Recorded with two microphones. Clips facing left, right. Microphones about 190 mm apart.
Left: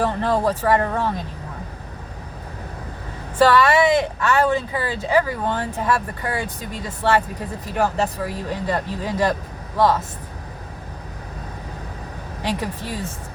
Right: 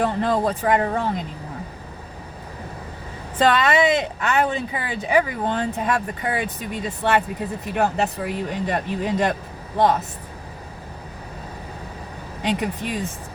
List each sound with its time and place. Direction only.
0.2 s speech: 15° right (ahead or behind)
3.3 s speech: 20° right (ahead or behind)
12.4 s speech: 20° right (ahead or behind)